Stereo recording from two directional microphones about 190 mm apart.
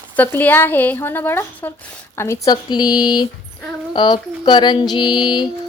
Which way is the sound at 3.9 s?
25° left (ahead or behind).